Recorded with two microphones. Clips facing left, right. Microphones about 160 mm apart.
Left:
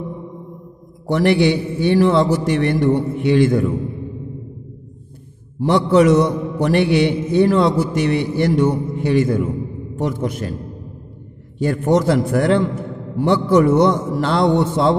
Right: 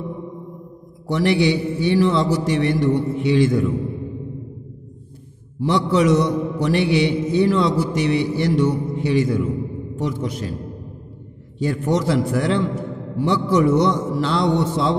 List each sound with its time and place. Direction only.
1.0 s a man's voice: 55° left (ahead or behind)
5.6 s a man's voice: 50° left (ahead or behind)
11.5 s a man's voice: 55° left (ahead or behind)